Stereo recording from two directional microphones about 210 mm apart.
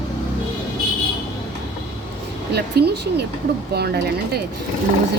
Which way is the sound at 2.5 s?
50° right (ahead or behind).